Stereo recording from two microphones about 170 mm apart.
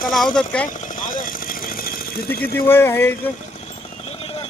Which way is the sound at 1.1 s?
55° left (ahead or behind).